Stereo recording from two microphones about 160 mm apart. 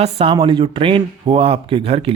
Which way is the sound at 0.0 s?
40° right (ahead or behind).